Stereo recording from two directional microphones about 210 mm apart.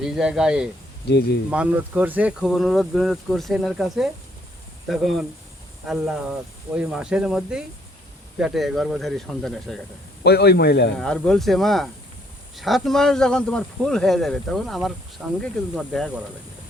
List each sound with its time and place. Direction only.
0.0 s speech: 5° right (ahead or behind)
1.0 s a man's voice: 50° left (ahead or behind)
1.5 s speech: 5° right (ahead or behind)
10.2 s a man's voice: 50° left (ahead or behind)
11.0 s speech: 5° left (ahead or behind)